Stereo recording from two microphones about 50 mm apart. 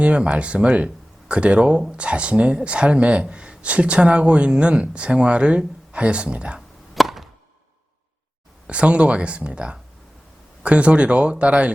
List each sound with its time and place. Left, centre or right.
0.0 s speech: right
6.9 s chop: centre
8.6 s speech: right